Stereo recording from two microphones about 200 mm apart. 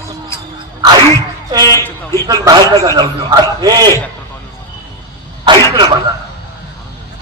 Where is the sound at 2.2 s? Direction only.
20° right (ahead or behind).